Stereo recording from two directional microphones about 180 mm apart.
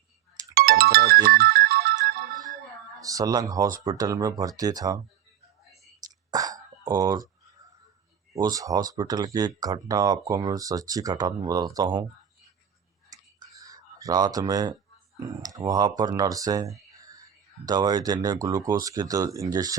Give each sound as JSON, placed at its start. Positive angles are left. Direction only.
{"t": 0.5, "sound": "ringtone", "side_deg": -60}
{"t": 3.0, "sound": "speech", "side_deg": -20}
{"t": 6.3, "sound": "throat clearing", "side_deg": -20}
{"t": 8.3, "sound": "speech", "side_deg": -20}
{"t": 13.6, "sound": "speech", "side_deg": -20}